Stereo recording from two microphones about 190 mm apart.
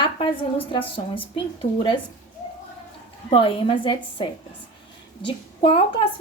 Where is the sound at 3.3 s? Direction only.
30° left (ahead or behind).